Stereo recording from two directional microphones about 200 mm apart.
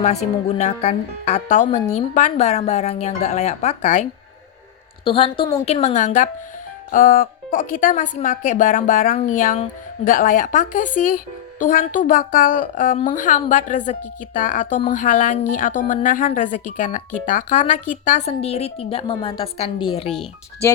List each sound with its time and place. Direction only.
0.0 s a woman's voice: 35° left (ahead or behind)
5.0 s a woman's voice: 25° left (ahead or behind)